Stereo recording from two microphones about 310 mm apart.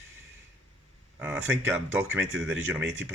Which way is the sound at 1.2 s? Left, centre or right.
Centre.